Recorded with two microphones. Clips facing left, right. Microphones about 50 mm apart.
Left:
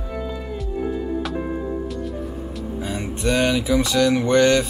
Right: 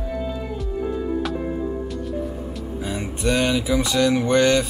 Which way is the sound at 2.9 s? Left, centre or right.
Centre.